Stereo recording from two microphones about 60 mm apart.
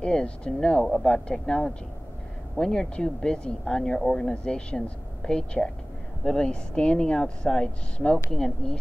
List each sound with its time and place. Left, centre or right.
0.0 s speech: centre